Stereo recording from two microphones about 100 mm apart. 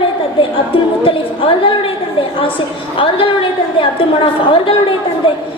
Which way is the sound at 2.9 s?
60° left (ahead or behind).